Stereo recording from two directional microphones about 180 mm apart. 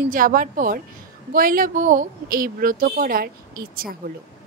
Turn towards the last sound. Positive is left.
turn(degrees=-55)  # may be behind; listen again after turning